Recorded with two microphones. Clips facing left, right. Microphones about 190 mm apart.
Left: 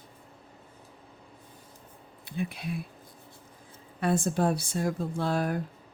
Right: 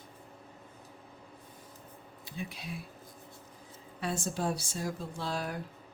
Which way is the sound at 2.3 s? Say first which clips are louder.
Left 7 dB; 60° left (ahead or behind).